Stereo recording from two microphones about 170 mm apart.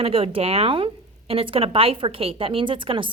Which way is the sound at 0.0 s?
35° right (ahead or behind).